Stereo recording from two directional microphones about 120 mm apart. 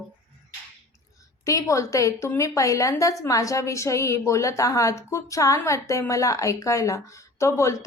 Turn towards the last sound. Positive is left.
turn(degrees=25)  # may be behind; listen again after turning